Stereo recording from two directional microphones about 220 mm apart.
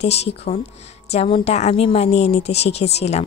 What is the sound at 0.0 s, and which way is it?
A woman's voice, 30° left (ahead or behind).